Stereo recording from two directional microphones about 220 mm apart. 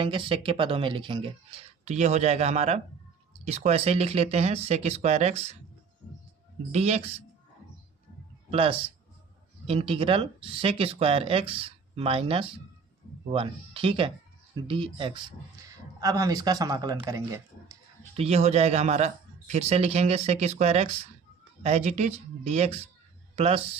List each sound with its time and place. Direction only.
0.0 s a man's voice: 25° right (ahead or behind)
6.7 s a man's voice: 30° right (ahead or behind)
8.4 s a man's voice: 25° right (ahead or behind)
18.2 s a man's voice: 30° right (ahead or behind)